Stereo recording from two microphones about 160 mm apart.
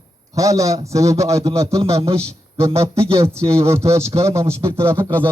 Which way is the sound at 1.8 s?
35° right (ahead or behind).